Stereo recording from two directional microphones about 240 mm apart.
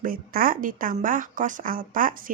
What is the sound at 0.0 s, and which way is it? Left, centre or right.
Speech, right.